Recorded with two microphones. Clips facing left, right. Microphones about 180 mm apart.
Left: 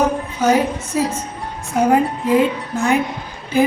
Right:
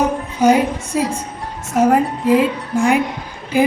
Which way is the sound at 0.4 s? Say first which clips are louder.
Right 3 dB; 15° right (ahead or behind).